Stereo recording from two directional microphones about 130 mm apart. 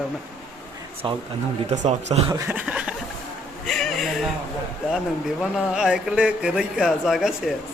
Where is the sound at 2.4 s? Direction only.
15° right (ahead or behind).